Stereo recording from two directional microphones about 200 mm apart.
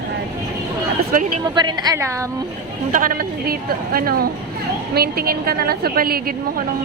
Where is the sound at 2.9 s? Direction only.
40° right (ahead or behind).